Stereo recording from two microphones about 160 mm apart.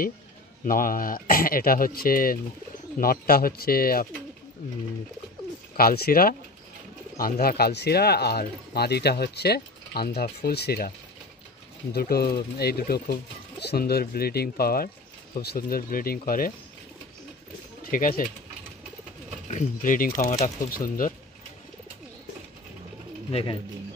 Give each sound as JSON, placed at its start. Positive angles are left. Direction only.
{"t": 0.7, "sound": "speech", "side_deg": 60}
{"t": 5.8, "sound": "speech", "side_deg": 70}
{"t": 11.9, "sound": "speech", "side_deg": 75}
{"t": 17.9, "sound": "speech", "side_deg": 60}
{"t": 19.4, "sound": "speech", "side_deg": 45}
{"t": 23.3, "sound": "speech", "side_deg": 35}